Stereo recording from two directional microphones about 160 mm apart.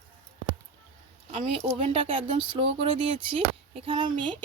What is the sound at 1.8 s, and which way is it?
Speech, 35° right (ahead or behind).